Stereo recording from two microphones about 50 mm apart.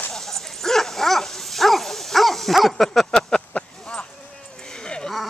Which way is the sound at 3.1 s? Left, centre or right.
Centre.